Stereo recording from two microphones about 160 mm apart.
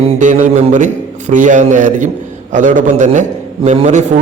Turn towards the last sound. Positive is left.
turn(degrees=-45)  # may be behind; listen again after turning